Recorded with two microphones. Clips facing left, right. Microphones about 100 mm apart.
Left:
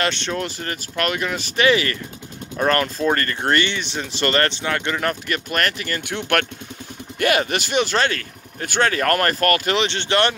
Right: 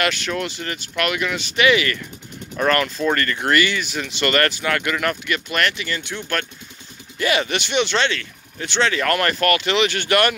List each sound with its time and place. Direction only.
0.0 s speech: 30° left (ahead or behind); by 6.4 s 60° left (ahead or behind)
7.2 s speech: 50° left (ahead or behind)
9.8 s speech: 25° left (ahead or behind)